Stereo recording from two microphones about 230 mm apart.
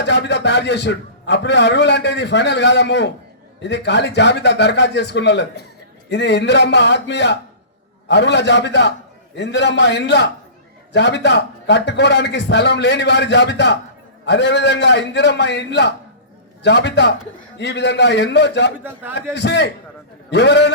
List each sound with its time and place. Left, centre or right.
0.0 s a man's voice: left
18.8 s a man's voice: centre
19.3 s a man's voice: left